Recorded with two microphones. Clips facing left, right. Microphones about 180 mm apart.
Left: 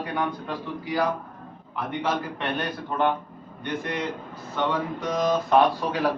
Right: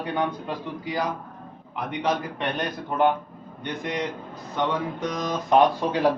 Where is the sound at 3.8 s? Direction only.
15° right (ahead or behind).